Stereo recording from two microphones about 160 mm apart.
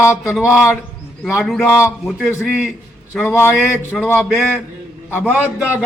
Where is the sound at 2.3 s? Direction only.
15° left (ahead or behind).